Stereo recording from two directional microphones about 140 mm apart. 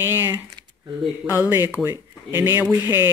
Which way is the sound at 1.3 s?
15° right (ahead or behind).